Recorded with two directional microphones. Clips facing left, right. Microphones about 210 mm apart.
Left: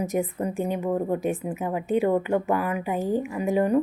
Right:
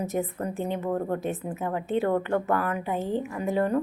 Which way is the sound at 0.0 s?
15° left (ahead or behind).